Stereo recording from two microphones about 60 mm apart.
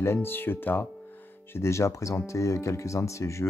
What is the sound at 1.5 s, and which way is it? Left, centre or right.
Speech, left.